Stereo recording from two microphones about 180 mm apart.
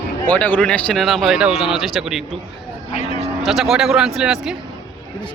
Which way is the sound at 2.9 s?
35° left (ahead or behind).